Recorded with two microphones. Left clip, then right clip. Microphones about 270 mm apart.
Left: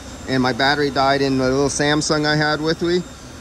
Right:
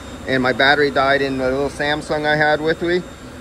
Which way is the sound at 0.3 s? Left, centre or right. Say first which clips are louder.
Right 3 dB; centre.